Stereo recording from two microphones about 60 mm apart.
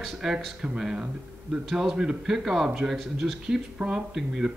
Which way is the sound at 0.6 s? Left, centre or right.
Centre.